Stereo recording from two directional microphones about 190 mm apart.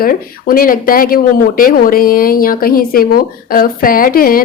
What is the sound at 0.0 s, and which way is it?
Speech, 50° left (ahead or behind).